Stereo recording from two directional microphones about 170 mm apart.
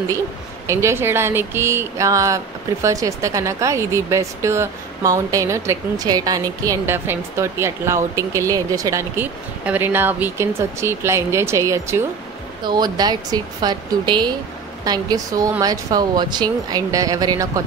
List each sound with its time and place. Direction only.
0.7 s speech: 15° right (ahead or behind)